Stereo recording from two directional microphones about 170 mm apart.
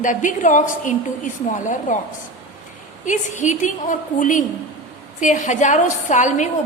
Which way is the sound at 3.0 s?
45° left (ahead or behind).